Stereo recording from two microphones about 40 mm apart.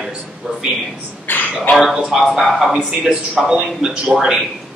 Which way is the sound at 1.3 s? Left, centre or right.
Left.